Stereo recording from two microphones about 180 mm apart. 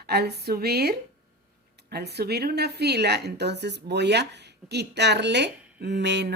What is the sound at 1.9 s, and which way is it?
Speech, 65° right (ahead or behind).